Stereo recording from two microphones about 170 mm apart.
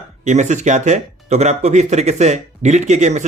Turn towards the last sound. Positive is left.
turn(degrees=-45)  # may be behind; listen again after turning